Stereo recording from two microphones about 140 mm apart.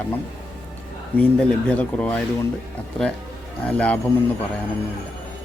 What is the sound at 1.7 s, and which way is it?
Speech, 10° left (ahead or behind).